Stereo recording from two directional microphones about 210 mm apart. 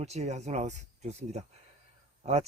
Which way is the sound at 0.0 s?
30° right (ahead or behind).